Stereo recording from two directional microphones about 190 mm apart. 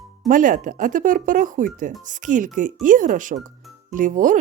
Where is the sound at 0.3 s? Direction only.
45° right (ahead or behind).